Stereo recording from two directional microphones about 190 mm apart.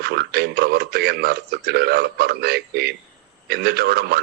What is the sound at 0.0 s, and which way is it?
A man's voice, 55° right (ahead or behind).